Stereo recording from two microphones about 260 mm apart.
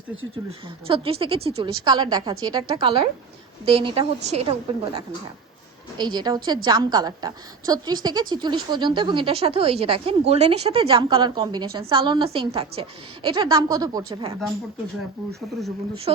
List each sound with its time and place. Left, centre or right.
0.9 s a woman's voice: right
16.1 s a woman's voice: right